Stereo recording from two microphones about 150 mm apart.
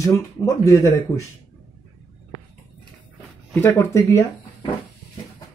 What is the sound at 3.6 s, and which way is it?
Speech, 20° left (ahead or behind).